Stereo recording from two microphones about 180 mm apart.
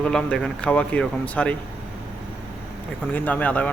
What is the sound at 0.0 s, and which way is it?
Speech, 5° left (ahead or behind).